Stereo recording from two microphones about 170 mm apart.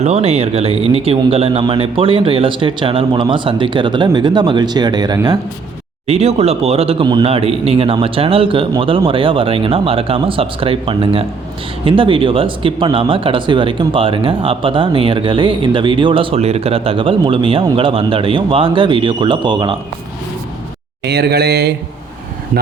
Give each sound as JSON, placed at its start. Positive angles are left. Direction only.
{"t": 0.0, "sound": "a man's voice", "side_deg": -40}
{"t": 6.1, "sound": "speech", "side_deg": -35}
{"t": 21.0, "sound": "speech", "side_deg": -75}